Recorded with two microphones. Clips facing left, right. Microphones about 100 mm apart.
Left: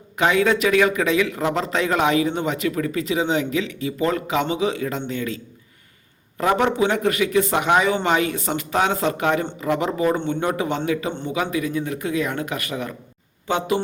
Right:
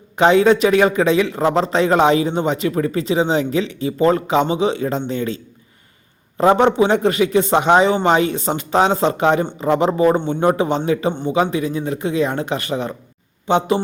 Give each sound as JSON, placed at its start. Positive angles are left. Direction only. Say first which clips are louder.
{"t": 0.2, "sound": "a man's voice", "louder": "right 6 dB", "side_deg": -30}